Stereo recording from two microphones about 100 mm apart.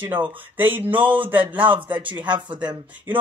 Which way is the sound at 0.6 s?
20° right (ahead or behind).